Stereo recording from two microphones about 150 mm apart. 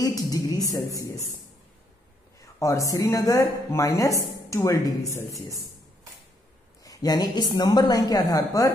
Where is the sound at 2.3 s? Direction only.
20° left (ahead or behind).